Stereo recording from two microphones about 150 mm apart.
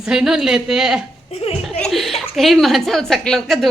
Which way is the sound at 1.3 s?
40° left (ahead or behind).